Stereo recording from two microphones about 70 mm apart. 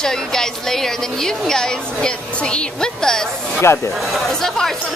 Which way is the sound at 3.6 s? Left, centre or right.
Left.